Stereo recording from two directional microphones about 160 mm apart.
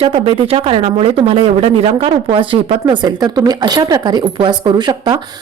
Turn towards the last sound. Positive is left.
turn(degrees=-25)  # may be behind; listen again after turning